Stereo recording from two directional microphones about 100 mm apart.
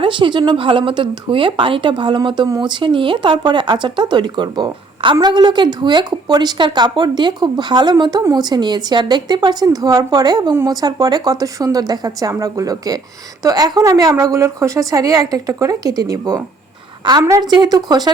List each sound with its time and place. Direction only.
0.0 s a woman's voice: 55° right (ahead or behind); by 16.4 s 35° right (ahead or behind)
17.5 s a woman's voice: 40° right (ahead or behind)